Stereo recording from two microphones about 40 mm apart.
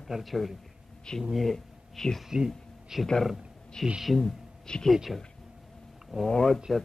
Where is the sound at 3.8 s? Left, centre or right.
Centre.